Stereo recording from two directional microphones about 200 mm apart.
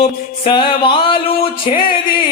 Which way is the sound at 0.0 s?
25° left (ahead or behind).